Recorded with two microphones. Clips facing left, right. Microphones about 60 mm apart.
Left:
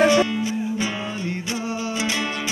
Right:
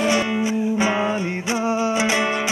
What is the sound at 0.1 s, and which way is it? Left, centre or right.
Music, right.